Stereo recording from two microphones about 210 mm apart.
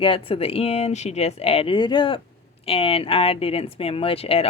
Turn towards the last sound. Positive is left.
turn(degrees=30)  # may be behind; listen again after turning